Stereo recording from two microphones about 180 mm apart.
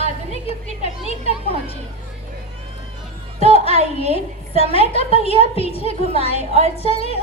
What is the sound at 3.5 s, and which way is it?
A woman's voice, 35° left (ahead or behind).